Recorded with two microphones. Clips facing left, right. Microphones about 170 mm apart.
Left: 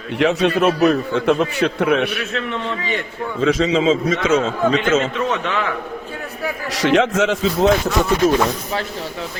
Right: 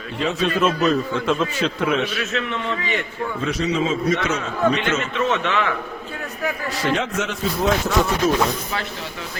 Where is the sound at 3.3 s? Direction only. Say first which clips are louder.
Left 6 dB; 90° left.